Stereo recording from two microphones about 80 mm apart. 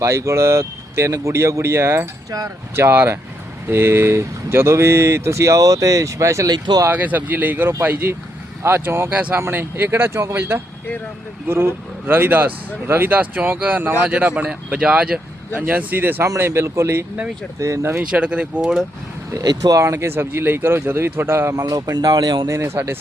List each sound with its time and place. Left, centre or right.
0.0 s speech: right
6.5 s speech: right
6.9 s speech: right
11.4 s speech: right
16.2 s speech: right
18.1 s speech: centre
19.3 s speech: right
19.8 s speech: right
21.6 s speech: right
22.4 s speech: right